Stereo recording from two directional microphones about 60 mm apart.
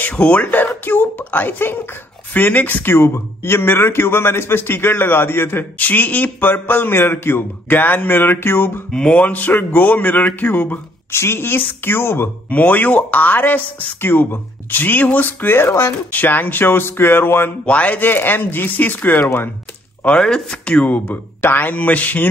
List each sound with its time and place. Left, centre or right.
0.0 s speech: centre
0.5 s speech: left
8.9 s speech: centre
9.3 s speech: left
11.1 s speech: left
12.4 s speech: left
16.1 s speech: left
17.6 s speech: left
20.1 s speech: centre; by 22.3 s left